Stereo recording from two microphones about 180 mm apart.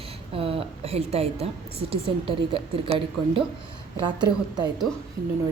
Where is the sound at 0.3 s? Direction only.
30° right (ahead or behind).